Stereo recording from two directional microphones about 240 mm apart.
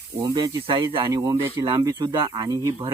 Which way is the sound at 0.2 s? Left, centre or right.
Centre.